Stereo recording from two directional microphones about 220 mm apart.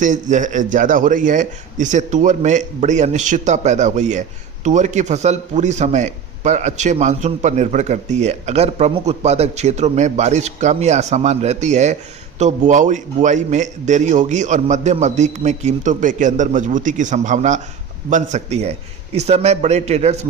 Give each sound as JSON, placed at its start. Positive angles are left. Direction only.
{"t": 0.0, "sound": "a man's voice", "side_deg": -35}